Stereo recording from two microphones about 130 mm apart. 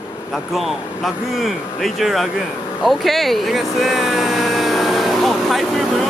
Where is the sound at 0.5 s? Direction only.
Centre (ahead or behind).